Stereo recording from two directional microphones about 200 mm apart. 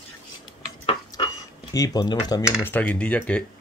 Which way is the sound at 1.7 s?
20° left (ahead or behind).